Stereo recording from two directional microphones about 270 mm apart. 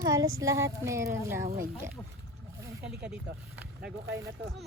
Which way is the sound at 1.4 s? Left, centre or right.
Right.